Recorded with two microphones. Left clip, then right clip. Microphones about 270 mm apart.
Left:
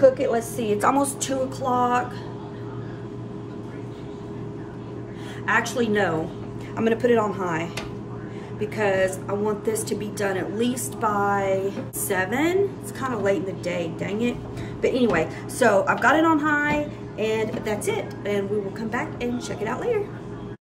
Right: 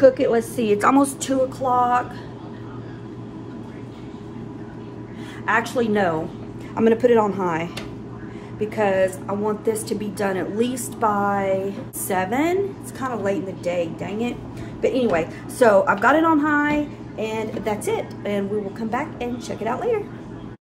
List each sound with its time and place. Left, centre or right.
0.0 s a woman's voice: right
5.5 s a woman's voice: centre